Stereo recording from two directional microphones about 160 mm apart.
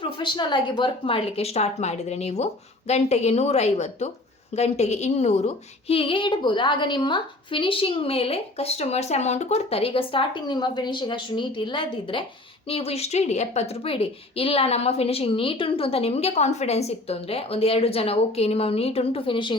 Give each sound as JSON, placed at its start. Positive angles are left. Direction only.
{"t": 0.0, "sound": "a woman's voice", "side_deg": 30}